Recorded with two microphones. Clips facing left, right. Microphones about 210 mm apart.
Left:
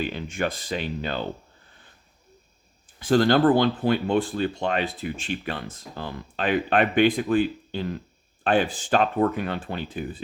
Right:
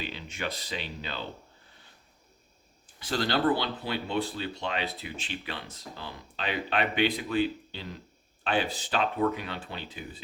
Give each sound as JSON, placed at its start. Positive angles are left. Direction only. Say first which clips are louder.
{"t": 0.0, "sound": "speech", "louder": "left 8 dB", "side_deg": 50}
{"t": 3.0, "sound": "speech", "louder": "left 9 dB", "side_deg": 50}